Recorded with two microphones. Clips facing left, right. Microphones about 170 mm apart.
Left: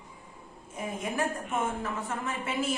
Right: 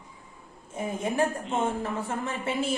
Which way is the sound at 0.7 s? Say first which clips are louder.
Right 5 dB; 30° right (ahead or behind).